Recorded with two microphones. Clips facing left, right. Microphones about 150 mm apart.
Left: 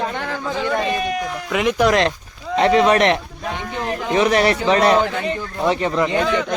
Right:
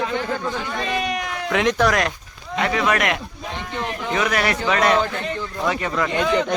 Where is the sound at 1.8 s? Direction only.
25° left (ahead or behind).